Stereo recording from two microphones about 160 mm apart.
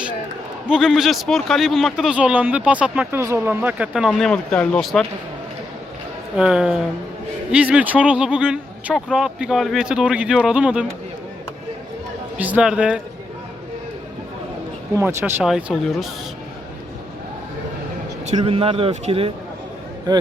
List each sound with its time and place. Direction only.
0.7 s a man's voice: 5° right (ahead or behind)
6.3 s a man's voice: 5° right (ahead or behind)
12.4 s speech: 10° right (ahead or behind)
15.2 s a man's voice: 5° right (ahead or behind)
18.3 s speech: 35° right (ahead or behind)